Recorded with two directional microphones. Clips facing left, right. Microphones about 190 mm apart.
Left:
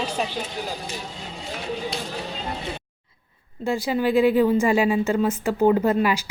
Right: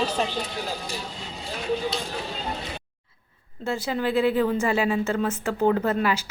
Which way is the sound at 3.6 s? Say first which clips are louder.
Left 4 dB; 10° left (ahead or behind).